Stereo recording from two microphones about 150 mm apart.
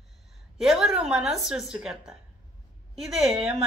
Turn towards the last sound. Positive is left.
turn(degrees=-5)  # may be behind; listen again after turning